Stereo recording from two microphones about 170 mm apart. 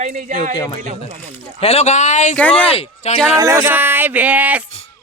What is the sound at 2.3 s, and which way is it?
Speech, 5° left (ahead or behind).